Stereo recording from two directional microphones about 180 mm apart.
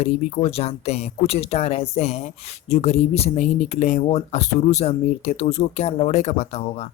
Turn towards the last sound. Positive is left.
turn(degrees=35)  # may be behind; listen again after turning